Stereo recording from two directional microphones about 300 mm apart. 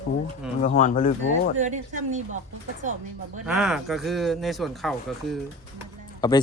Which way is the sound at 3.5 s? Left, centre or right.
Centre.